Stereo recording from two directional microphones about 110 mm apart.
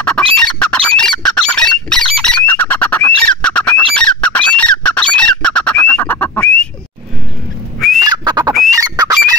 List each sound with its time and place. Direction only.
0.0 s squawk: 10° left (ahead or behind)
1.2 s bird: 5° left (ahead or behind)
8.0 s bird: 40° right (ahead or behind)
8.7 s a sound: 35° right (ahead or behind)